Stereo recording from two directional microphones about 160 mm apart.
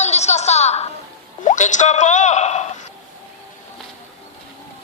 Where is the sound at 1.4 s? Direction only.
50° left (ahead or behind).